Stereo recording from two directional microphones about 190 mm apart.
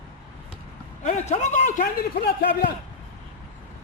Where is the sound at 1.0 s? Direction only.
35° left (ahead or behind); by 2.7 s 55° left (ahead or behind).